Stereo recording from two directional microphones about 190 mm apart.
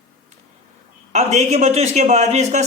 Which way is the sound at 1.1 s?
35° right (ahead or behind).